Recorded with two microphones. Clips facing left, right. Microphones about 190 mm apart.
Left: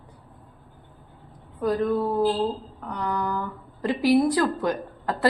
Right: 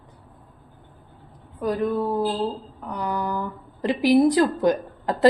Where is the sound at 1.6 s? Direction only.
15° right (ahead or behind).